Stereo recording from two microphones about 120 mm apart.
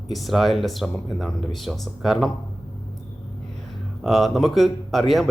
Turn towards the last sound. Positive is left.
turn(degrees=0)  # may be behind; listen again after turning